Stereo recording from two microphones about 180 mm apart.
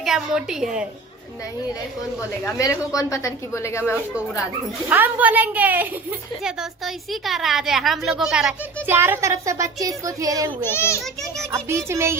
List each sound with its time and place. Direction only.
0.0 s a woman's voice: 5° right (ahead or behind)
2.6 s a woman's voice: 20° left (ahead or behind)
4.9 s a woman's voice: 10° right (ahead or behind)
10.6 s a woman's voice: 15° left (ahead or behind)
11.0 s a woman's voice: 5° left (ahead or behind)
11.5 s a woman's voice: 15° right (ahead or behind)